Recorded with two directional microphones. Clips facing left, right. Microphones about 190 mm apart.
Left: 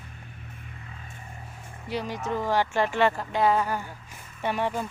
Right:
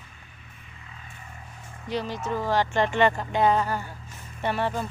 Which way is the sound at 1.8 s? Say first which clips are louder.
Right 1 dB; 10° left (ahead or behind).